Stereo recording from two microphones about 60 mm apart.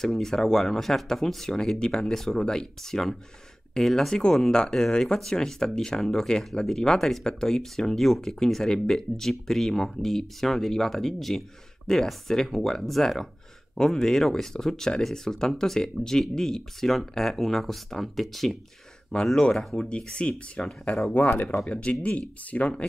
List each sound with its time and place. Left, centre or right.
0.0 s speech: centre
21.1 s speech: left